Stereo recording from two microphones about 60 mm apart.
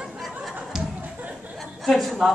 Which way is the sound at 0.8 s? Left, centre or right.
Centre.